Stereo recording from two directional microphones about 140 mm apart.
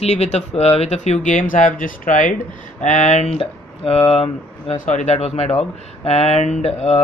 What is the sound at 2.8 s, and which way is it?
Speech, 60° left (ahead or behind).